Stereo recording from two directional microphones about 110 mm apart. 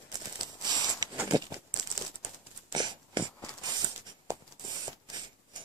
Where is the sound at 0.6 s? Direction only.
40° right (ahead or behind).